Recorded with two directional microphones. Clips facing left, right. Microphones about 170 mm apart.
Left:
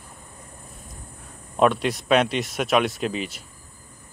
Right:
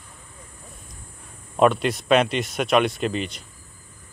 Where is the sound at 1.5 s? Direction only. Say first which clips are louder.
Right 1 dB; centre (ahead or behind).